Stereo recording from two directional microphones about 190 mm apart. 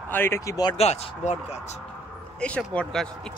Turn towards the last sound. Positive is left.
turn(degrees=5)  # may be behind; listen again after turning